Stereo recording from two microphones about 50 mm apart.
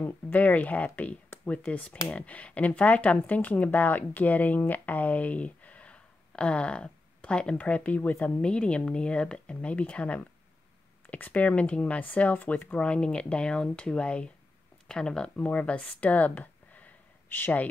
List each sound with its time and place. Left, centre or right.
0.3 s speech: left
8.4 s speech: left
12.7 s speech: left